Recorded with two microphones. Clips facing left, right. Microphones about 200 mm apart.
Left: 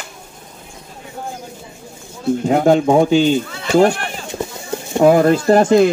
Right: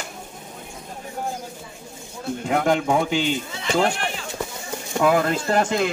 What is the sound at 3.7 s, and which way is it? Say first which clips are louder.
Speech: left 8 dB; 40° left (ahead or behind).